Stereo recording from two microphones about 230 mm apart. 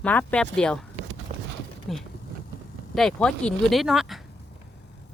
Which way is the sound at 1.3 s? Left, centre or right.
Right.